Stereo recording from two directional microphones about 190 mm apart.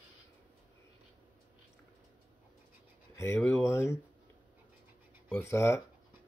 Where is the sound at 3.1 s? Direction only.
15° left (ahead or behind).